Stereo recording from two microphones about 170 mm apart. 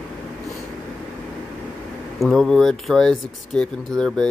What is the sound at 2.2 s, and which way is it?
Speech, centre (ahead or behind).